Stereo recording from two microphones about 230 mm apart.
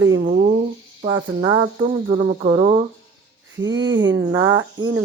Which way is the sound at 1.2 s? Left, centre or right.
Centre.